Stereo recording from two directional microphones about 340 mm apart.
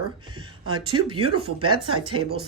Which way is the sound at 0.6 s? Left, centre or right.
Right.